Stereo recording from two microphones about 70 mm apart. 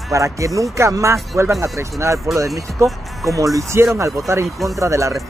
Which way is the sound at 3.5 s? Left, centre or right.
Right.